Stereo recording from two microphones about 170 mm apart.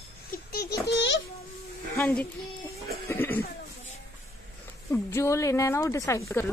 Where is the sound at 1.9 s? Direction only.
10° left (ahead or behind).